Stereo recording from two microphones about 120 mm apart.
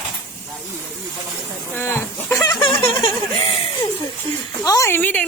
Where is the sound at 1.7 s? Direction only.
20° left (ahead or behind); by 3.8 s 45° left (ahead or behind).